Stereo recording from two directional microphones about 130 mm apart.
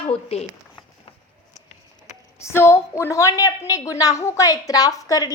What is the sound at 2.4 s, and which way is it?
A woman's voice, 20° left (ahead or behind).